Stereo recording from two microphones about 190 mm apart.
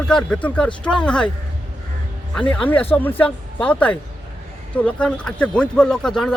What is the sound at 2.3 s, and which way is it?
Speech, 5° left (ahead or behind).